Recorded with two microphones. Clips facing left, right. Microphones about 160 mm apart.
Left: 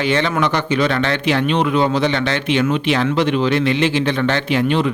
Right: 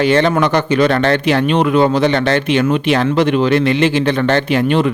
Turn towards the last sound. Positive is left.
turn(degrees=-50)  # may be behind; listen again after turning